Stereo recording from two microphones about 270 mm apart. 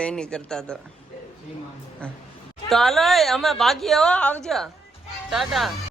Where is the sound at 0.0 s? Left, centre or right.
Centre.